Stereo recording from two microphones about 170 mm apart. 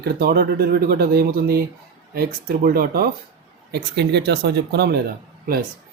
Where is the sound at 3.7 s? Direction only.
75° right (ahead or behind).